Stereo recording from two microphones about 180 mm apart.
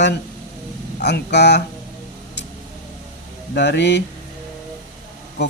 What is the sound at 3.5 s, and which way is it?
Speech, 70° left (ahead or behind).